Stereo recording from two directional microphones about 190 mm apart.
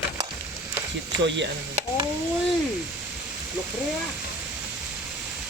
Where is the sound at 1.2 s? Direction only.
70° right (ahead or behind).